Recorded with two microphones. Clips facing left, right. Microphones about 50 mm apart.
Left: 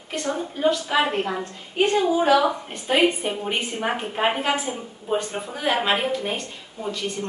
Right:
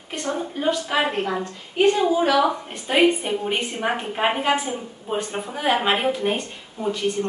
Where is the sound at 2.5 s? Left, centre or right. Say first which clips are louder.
Even; centre.